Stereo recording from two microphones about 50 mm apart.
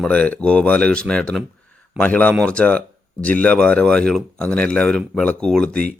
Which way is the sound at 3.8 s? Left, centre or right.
Centre.